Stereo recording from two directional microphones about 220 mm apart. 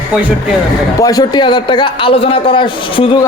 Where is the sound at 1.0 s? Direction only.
15° left (ahead or behind).